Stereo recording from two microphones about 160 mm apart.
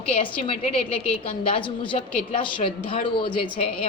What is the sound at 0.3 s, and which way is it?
A woman's voice, 35° left (ahead or behind).